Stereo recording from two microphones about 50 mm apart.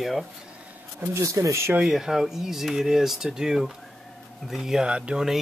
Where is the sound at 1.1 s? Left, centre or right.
Right.